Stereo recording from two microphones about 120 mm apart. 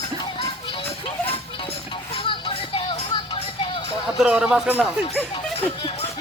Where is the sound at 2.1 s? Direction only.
45° left (ahead or behind).